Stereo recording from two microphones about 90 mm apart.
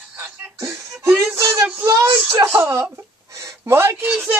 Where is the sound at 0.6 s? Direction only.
35° right (ahead or behind).